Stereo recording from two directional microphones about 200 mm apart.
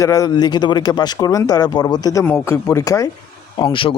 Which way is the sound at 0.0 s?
15° left (ahead or behind).